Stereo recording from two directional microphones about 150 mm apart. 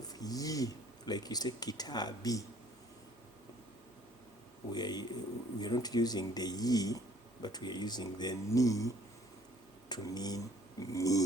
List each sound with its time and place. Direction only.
0.1 s speech: 25° left (ahead or behind)
4.7 s speech: 25° left (ahead or behind)
9.9 s a sound: 25° left (ahead or behind)